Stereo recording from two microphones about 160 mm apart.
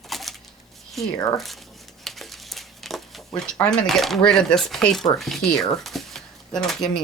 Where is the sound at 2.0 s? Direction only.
Centre (ahead or behind).